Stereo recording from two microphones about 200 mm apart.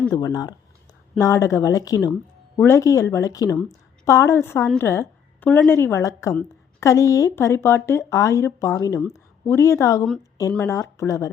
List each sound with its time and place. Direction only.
0.1 s a woman's voice: 20° left (ahead or behind)